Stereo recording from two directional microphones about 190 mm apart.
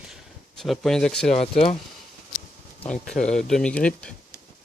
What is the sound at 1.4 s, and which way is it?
Speech, 30° left (ahead or behind).